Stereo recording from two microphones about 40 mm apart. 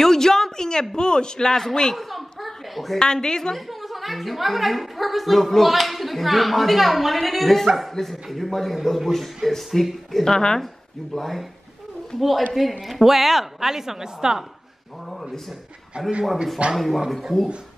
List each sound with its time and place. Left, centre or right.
0.0 s a sound: centre
0.9 s a man's voice: left
2.0 s a sound: centre
3.0 s a man's voice: centre
3.5 s a woman's voice: centre
10.1 s a man's voice: centre
11.1 s a woman's voice: centre
16.7 s a woman's voice: centre